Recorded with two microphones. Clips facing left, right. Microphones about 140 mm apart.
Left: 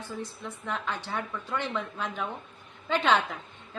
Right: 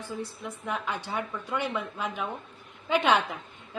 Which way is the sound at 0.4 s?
10° right (ahead or behind).